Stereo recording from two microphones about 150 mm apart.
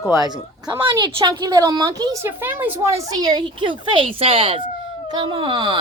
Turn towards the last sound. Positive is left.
turn(degrees=-30)  # may be behind; listen again after turning